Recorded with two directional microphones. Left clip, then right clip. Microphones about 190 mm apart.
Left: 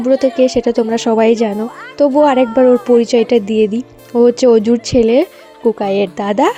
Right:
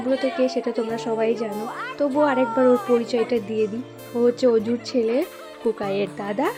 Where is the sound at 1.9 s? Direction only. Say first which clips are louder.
Left 10 dB; 35° left (ahead or behind).